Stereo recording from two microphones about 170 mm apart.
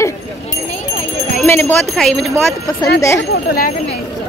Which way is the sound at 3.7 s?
35° left (ahead or behind).